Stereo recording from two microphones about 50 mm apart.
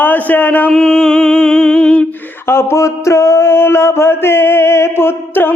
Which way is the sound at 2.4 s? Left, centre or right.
Left.